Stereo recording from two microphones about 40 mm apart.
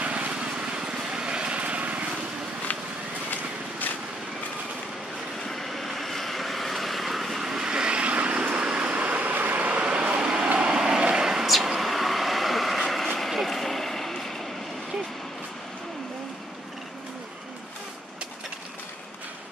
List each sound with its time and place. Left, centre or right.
0.0 s vehicle: right
0.4 s vehicle: right
5.5 s vehicle: centre
7.5 s vehicle: centre
9.3 s vehicle: right
9.7 s vehicle: right
11.4 s vehicle: centre